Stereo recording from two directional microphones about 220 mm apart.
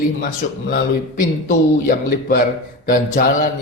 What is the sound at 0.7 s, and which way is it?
A man's voice, 40° left (ahead or behind).